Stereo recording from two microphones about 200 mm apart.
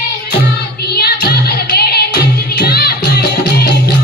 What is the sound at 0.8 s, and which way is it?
Music, 50° left (ahead or behind).